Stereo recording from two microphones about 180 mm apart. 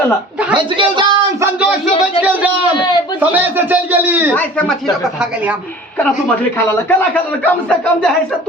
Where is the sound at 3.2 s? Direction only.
10° right (ahead or behind).